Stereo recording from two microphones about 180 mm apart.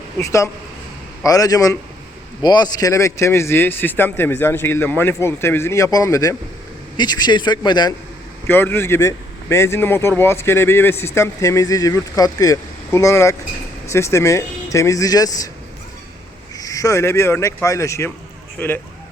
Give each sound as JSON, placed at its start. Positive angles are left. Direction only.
{"t": 0.2, "sound": "speech", "side_deg": 15}
{"t": 8.4, "sound": "speech", "side_deg": 10}
{"t": 16.6, "sound": "speech", "side_deg": 20}